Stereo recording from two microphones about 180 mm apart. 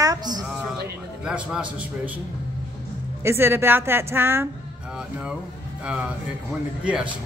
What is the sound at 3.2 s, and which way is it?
A woman's voice, 15° right (ahead or behind).